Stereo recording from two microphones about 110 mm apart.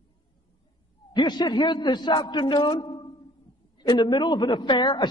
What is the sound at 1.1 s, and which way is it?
A man's voice, 45° left (ahead or behind).